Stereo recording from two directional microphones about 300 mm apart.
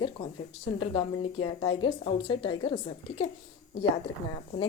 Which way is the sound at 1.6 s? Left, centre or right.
Centre.